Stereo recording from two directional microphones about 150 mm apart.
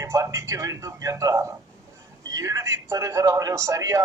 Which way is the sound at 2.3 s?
20° right (ahead or behind).